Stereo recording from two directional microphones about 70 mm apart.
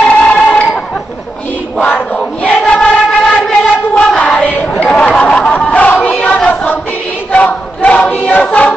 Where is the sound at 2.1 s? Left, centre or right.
Centre.